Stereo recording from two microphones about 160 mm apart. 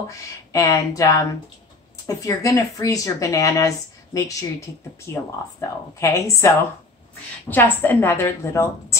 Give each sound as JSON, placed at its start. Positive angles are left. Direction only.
{"t": 0.5, "sound": "a woman's voice", "side_deg": 20}